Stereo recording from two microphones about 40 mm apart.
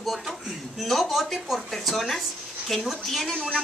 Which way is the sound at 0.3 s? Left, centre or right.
Centre.